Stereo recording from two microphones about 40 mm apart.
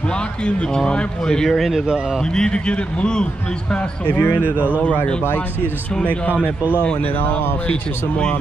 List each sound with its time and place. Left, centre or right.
0.8 s a man's voice: left
1.5 s speech: centre
2.3 s a man's voice: left
3.7 s speech: left